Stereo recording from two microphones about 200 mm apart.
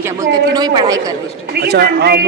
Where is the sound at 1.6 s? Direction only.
55° right (ahead or behind).